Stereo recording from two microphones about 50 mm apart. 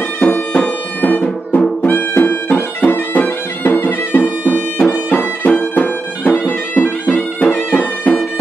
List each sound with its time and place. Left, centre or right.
0.2 s music: left